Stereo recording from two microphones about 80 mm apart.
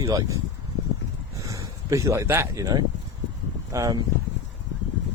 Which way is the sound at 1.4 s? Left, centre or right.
Right.